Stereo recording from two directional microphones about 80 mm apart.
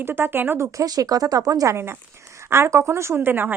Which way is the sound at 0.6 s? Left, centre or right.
Right.